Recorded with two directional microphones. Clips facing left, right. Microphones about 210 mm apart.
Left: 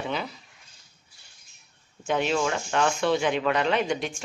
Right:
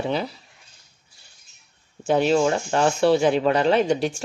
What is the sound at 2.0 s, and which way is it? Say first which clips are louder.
Speech: right 6 dB; 35° right (ahead or behind).